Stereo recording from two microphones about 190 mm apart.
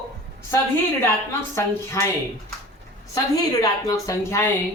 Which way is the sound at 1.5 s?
15° left (ahead or behind).